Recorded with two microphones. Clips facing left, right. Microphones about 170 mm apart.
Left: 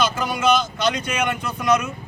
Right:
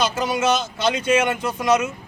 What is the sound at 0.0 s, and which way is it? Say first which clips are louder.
A man's voice: even; 25° right (ahead or behind).